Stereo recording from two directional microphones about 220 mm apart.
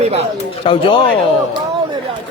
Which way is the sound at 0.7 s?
25° left (ahead or behind).